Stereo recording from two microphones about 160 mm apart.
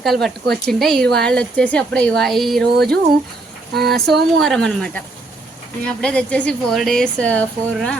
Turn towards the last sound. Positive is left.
turn(degrees=5)  # may be behind; listen again after turning